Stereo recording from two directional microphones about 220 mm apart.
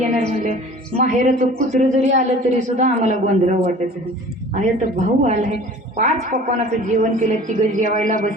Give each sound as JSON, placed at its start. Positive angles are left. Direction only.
{"t": 0.0, "sound": "music", "side_deg": -30}
{"t": 0.9, "sound": "a woman's voice", "side_deg": -35}